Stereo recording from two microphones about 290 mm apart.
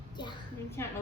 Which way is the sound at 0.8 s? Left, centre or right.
Centre.